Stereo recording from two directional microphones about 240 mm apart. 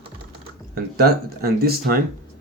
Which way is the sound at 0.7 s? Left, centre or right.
Right.